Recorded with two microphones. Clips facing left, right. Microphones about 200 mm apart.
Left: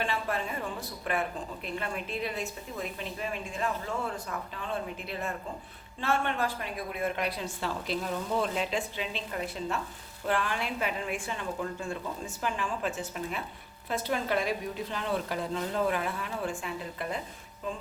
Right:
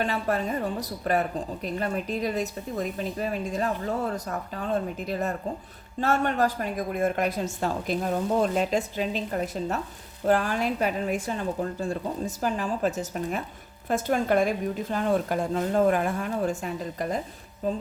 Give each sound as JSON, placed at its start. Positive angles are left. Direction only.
{"t": 0.0, "sound": "a woman's voice", "side_deg": -40}